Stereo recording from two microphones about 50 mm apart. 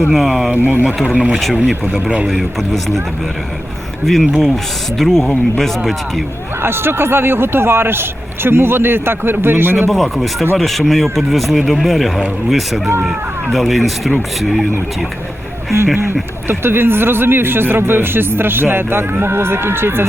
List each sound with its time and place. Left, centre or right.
0.1 s speech: centre
0.5 s speech: right
1.0 s speech: right
2.4 s speech: centre
4.0 s speech: centre
6.6 s speech: right
9.9 s speech: centre
16.5 s speech: right